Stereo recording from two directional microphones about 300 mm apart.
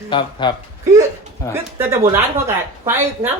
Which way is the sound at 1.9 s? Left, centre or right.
Centre.